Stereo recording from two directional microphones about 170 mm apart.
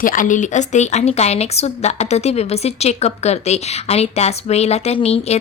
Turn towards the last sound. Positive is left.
turn(degrees=35)  # may be behind; listen again after turning